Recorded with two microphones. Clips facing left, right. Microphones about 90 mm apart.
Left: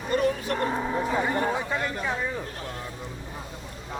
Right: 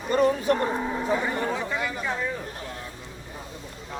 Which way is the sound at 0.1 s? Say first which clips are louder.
Right 4 dB; 25° right (ahead or behind).